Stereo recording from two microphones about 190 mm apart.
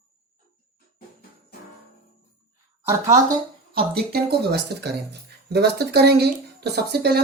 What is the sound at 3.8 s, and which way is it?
Speech, 55° right (ahead or behind).